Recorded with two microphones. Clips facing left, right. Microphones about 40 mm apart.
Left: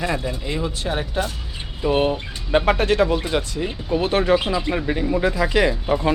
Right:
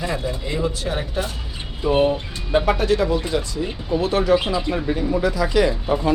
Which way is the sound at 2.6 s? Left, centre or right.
Left.